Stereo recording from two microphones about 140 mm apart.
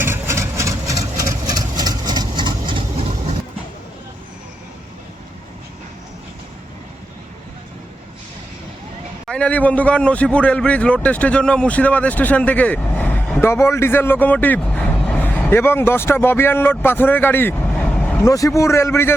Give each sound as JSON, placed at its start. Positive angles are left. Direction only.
{"t": 0.0, "sound": "vehicle", "side_deg": -20}
{"t": 9.2, "sound": "a man's voice", "side_deg": 5}
{"t": 18.3, "sound": "a man's voice", "side_deg": 25}